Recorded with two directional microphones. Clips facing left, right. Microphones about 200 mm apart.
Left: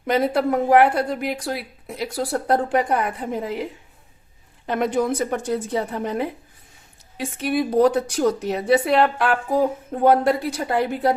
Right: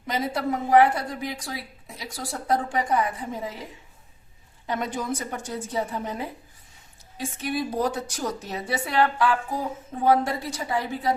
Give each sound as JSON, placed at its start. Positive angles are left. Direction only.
{"t": 0.1, "sound": "a woman's voice", "side_deg": 60}